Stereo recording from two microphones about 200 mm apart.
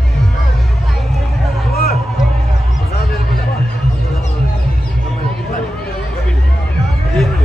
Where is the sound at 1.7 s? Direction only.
50° left (ahead or behind).